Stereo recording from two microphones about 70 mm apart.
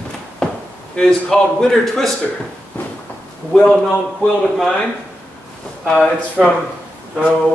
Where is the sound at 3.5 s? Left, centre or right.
Centre.